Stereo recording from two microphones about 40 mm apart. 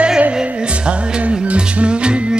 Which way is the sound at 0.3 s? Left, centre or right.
Right.